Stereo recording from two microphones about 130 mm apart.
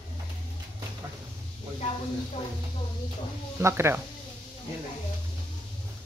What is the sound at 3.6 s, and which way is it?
Speech, 20° right (ahead or behind).